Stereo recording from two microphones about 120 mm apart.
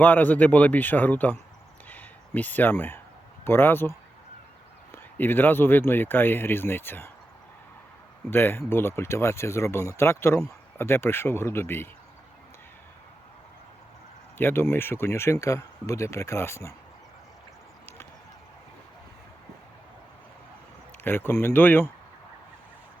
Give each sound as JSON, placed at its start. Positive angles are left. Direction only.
{"t": 0.0, "sound": "speech", "side_deg": 15}
{"t": 1.9, "sound": "a sound", "side_deg": 15}
{"t": 3.4, "sound": "speech", "side_deg": 20}
{"t": 8.3, "sound": "speech", "side_deg": 20}
{"t": 14.3, "sound": "speech", "side_deg": 20}
{"t": 21.0, "sound": "speech", "side_deg": 20}